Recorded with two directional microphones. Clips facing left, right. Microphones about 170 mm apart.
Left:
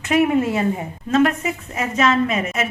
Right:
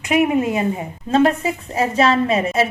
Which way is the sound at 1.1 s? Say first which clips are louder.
Right 2 dB; 30° right (ahead or behind).